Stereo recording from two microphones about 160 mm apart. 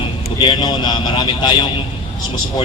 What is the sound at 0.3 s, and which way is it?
A man's voice, 30° left (ahead or behind).